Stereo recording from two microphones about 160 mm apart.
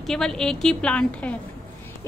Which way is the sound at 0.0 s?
5° left (ahead or behind).